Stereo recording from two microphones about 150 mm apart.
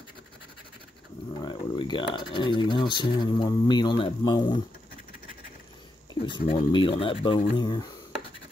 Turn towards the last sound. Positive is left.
turn(degrees=30)  # may be behind; listen again after turning